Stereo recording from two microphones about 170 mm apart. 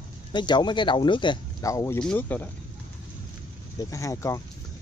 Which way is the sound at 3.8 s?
20° left (ahead or behind).